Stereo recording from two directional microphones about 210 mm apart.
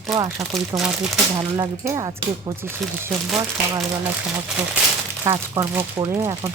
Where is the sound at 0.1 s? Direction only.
15° right (ahead or behind).